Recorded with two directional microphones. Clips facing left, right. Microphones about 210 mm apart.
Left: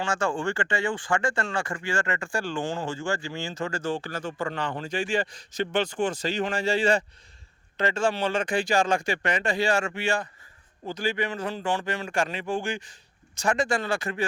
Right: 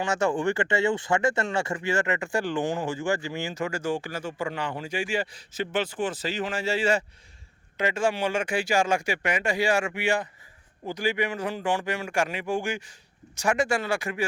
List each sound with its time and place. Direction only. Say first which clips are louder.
0.0 s speech: right 2 dB; 20° right (ahead or behind)